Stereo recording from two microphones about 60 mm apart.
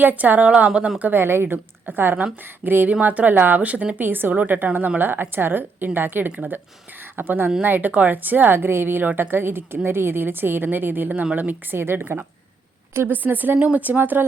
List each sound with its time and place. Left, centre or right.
0.0 s a woman's voice: right
1.1 s a woman's voice: right
4.0 s a woman's voice: right